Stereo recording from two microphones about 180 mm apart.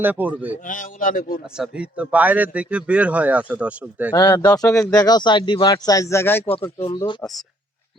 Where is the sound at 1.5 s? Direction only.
5° right (ahead or behind).